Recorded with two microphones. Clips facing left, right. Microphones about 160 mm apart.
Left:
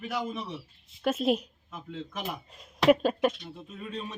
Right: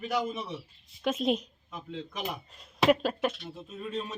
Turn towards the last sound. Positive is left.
turn(degrees=0)  # may be behind; listen again after turning